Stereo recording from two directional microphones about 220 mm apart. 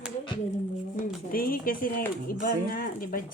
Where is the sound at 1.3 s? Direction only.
40° left (ahead or behind).